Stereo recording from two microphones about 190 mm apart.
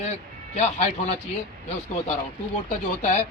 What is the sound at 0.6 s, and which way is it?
Speech, 35° left (ahead or behind).